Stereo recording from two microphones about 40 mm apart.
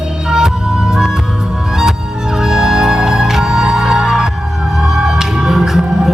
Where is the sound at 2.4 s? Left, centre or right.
Centre.